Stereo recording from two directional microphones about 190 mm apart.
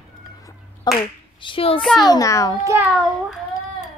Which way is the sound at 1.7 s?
5° left (ahead or behind).